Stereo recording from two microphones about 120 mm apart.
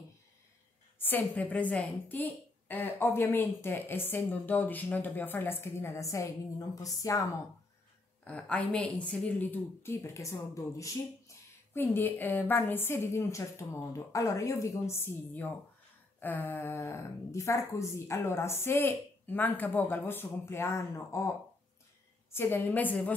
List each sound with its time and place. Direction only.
0.9 s a woman's voice: 15° left (ahead or behind)
8.2 s a woman's voice: 10° left (ahead or behind)
22.3 s a woman's voice: 15° left (ahead or behind)